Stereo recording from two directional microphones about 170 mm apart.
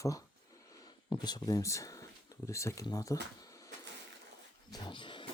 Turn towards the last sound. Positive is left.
turn(degrees=30)  # may be behind; listen again after turning